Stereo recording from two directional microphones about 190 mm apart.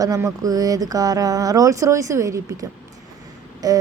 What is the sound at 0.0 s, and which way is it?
A woman's voice, 15° right (ahead or behind).